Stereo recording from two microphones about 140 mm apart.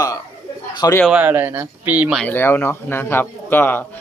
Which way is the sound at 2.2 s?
15° left (ahead or behind).